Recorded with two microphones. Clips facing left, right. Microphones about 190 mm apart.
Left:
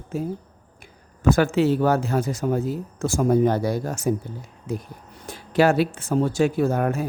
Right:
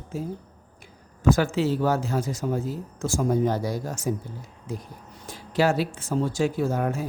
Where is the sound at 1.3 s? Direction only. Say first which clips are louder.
Left 5 dB; 60° left (ahead or behind).